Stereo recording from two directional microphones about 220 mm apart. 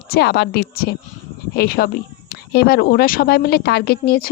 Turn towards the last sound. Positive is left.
turn(degrees=45)  # may be behind; listen again after turning